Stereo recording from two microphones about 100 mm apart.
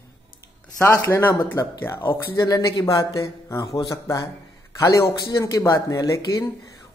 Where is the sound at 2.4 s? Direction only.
35° left (ahead or behind).